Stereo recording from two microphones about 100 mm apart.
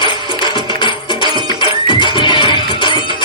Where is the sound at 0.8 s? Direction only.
55° left (ahead or behind).